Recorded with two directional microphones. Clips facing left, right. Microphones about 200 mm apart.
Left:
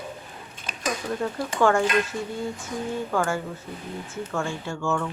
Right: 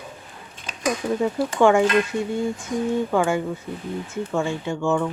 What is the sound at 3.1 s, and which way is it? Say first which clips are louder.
Speech: right 5 dB; 15° right (ahead or behind).